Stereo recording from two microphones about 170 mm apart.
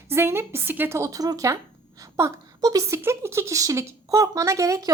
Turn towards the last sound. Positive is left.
turn(degrees=-20)  # may be behind; listen again after turning